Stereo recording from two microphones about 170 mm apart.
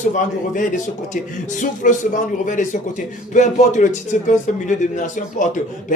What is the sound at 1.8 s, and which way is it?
A man's voice, 50° left (ahead or behind).